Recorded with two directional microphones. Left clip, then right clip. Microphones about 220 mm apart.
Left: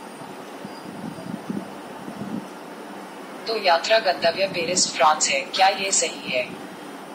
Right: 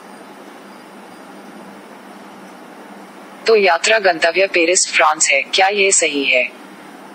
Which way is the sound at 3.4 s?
40° right (ahead or behind).